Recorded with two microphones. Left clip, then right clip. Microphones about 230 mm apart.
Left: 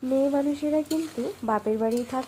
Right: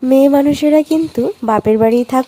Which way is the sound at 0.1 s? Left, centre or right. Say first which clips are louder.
Right 14 dB; right.